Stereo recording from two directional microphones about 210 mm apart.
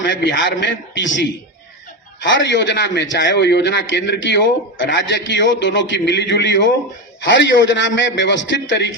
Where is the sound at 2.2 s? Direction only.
60° left (ahead or behind).